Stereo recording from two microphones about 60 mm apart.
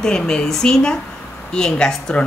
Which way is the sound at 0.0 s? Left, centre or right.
Centre.